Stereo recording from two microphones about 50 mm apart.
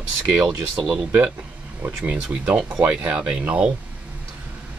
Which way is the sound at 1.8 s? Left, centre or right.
Right.